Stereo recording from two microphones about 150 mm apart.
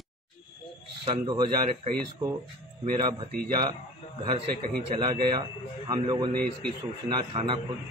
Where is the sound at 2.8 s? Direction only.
30° right (ahead or behind).